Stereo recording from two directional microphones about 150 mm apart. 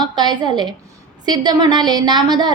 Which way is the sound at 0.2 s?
30° right (ahead or behind).